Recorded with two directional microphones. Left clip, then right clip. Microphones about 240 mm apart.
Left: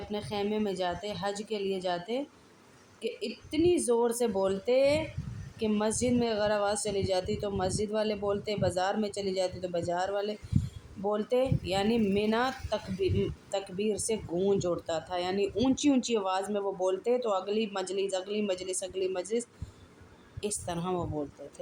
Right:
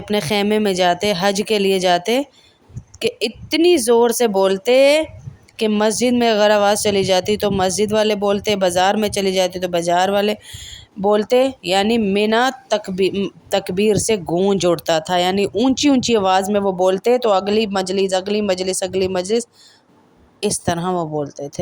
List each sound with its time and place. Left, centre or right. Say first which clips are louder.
0.1 s speech: right 16 dB; right